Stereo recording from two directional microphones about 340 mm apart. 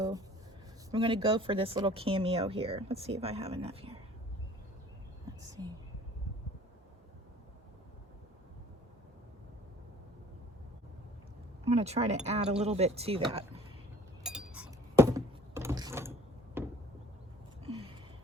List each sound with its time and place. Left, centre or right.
0.9 s speech: centre
5.2 s whispering: centre
11.6 s speech: centre
14.3 s a sound: centre